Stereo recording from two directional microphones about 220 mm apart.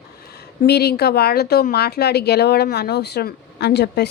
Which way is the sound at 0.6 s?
45° left (ahead or behind).